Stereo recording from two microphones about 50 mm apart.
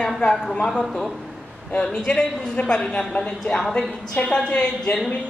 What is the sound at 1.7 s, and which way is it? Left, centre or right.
A man's voice, centre.